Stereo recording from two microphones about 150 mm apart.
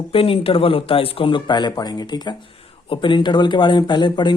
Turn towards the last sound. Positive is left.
turn(degrees=30)  # may be behind; listen again after turning